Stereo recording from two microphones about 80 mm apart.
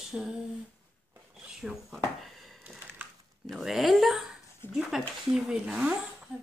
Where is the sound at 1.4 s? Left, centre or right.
Centre.